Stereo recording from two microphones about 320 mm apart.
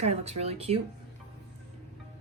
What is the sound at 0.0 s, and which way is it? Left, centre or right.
Speech, centre.